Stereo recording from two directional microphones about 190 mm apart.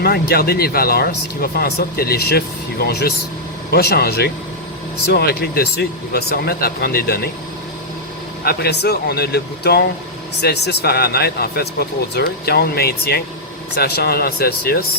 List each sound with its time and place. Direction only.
0.0 s speech: 55° left (ahead or behind)
8.4 s speech: 55° left (ahead or behind)